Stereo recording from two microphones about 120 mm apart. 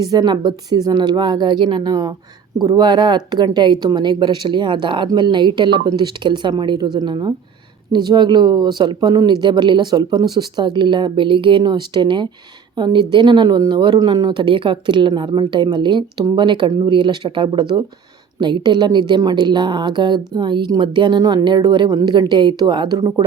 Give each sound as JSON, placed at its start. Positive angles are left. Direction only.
{"t": 0.0, "sound": "speech", "side_deg": -35}